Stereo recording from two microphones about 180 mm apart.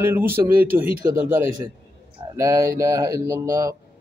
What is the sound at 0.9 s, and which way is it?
Speech, 50° right (ahead or behind).